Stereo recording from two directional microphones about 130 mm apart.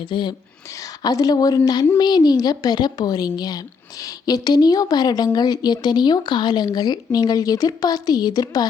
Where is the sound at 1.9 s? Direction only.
30° left (ahead or behind).